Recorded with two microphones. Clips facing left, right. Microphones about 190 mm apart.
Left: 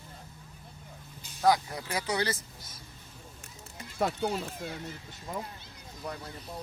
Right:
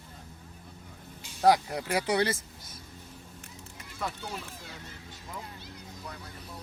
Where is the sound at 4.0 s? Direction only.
55° left (ahead or behind).